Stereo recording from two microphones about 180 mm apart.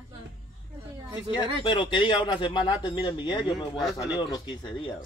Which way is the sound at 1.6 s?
25° left (ahead or behind).